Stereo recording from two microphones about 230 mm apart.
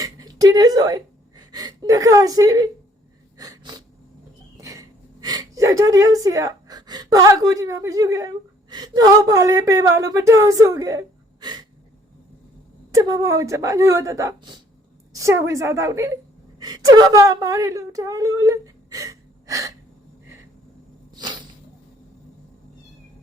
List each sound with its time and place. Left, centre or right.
0.0 s a sound: centre
3.3 s sneeze: centre
4.5 s gasp: centre
9.3 s a woman's voice: centre
12.9 s a woman's voice: centre
21.2 s a sound: centre